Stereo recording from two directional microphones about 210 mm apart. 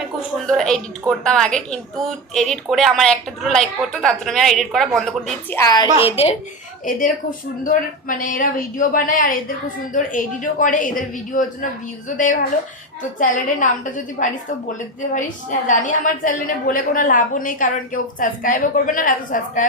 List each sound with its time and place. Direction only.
0.4 s speech: centre (ahead or behind)
5.5 s a child's voice: 20° left (ahead or behind)
5.9 s a woman's voice: 10° right (ahead or behind)
6.8 s a woman's voice: 40° left (ahead or behind)